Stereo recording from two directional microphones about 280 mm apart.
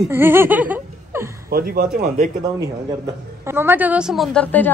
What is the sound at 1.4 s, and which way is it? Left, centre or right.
Speech, right.